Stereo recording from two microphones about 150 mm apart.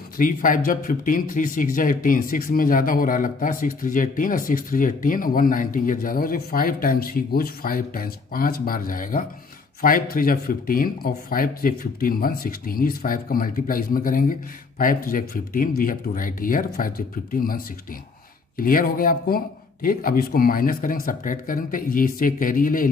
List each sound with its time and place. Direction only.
0.2 s speech: 65° left (ahead or behind)
18.6 s speech: 70° left (ahead or behind)